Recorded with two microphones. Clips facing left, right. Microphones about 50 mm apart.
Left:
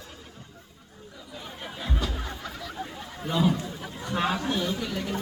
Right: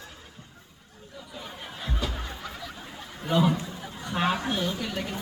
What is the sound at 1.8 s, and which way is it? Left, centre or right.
Chicken, centre.